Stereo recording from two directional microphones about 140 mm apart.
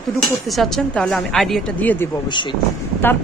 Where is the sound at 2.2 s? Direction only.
35° left (ahead or behind).